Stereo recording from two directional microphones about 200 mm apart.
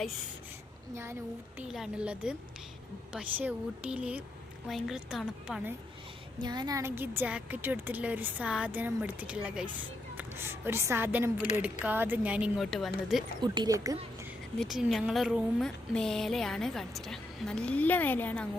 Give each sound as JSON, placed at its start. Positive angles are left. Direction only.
{"t": 1.5, "sound": "a woman's voice", "side_deg": -5}
{"t": 6.4, "sound": "a woman's voice", "side_deg": -20}
{"t": 13.4, "sound": "speech", "side_deg": -20}
{"t": 14.6, "sound": "a woman's voice", "side_deg": 0}